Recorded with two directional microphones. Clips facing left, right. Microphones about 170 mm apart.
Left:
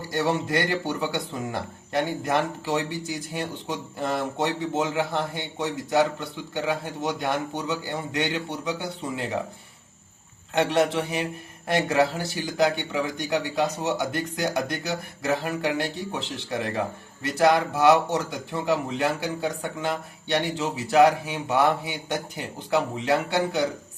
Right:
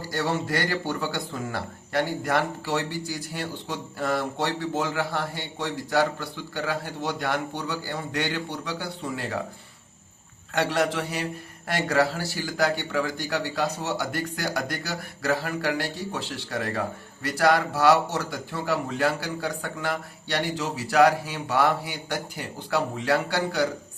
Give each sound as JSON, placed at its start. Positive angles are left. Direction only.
{"t": 0.1, "sound": "speech", "side_deg": 20}
{"t": 10.5, "sound": "speech", "side_deg": 20}